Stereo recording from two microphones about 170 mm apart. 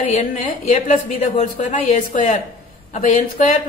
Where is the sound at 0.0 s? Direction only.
45° left (ahead or behind).